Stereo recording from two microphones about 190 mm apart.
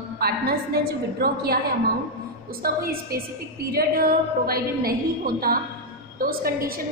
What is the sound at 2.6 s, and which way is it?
Speech, 50° right (ahead or behind).